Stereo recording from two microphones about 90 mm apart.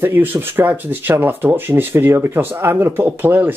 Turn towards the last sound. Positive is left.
turn(degrees=-25)  # may be behind; listen again after turning